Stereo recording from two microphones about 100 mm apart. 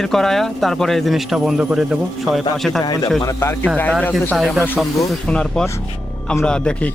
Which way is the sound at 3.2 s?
30° left (ahead or behind).